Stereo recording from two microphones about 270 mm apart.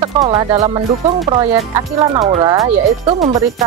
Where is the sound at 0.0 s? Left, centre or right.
Centre.